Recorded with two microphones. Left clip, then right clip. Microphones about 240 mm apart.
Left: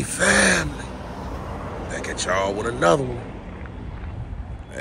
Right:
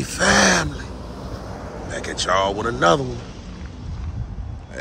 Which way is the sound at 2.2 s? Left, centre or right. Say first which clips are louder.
Right 3 dB; centre.